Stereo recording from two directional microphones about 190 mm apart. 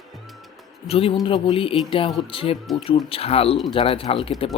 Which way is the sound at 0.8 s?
30° left (ahead or behind).